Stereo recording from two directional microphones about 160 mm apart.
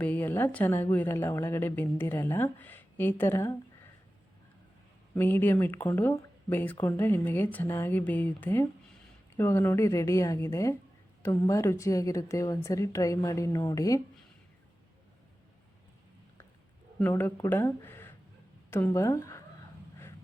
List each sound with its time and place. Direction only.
0.0 s speech: 10° left (ahead or behind)
5.1 s a woman's voice: 10° left (ahead or behind)
17.0 s a woman's voice: 15° left (ahead or behind)